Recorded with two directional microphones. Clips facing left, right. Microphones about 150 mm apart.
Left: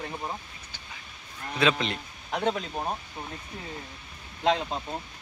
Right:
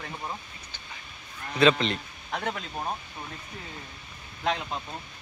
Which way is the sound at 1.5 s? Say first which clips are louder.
Right 4 dB; 10° left (ahead or behind).